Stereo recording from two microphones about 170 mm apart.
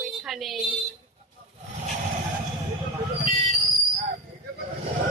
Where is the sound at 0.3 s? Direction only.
Centre (ahead or behind).